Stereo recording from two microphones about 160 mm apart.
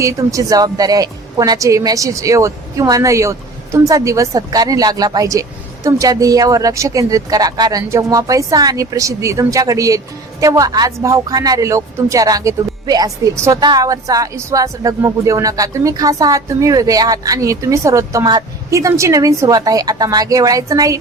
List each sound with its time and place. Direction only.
0.0 s speech: 20° right (ahead or behind)